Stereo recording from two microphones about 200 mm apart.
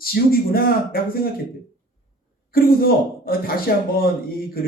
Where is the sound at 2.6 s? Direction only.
45° left (ahead or behind).